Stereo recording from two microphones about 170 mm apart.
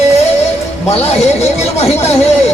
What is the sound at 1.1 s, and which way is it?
Speech, 40° left (ahead or behind).